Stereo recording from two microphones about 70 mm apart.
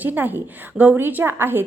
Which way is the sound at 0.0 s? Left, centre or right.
Right.